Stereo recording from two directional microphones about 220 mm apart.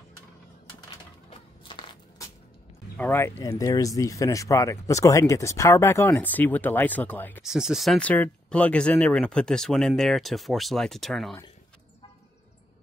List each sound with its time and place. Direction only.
1.6 s crushing: 20° left (ahead or behind)
3.0 s speech: 10° left (ahead or behind)
7.4 s speech: centre (ahead or behind)